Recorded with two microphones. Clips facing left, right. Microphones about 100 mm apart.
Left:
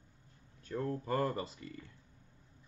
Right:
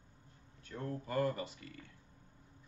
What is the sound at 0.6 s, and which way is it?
Speech, 35° left (ahead or behind).